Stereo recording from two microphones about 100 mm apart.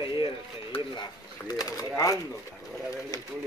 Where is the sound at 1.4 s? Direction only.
40° left (ahead or behind).